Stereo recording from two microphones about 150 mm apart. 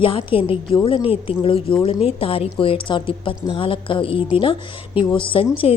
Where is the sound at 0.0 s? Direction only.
35° left (ahead or behind).